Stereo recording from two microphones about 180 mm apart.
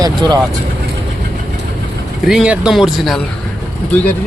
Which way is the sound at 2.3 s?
5° right (ahead or behind).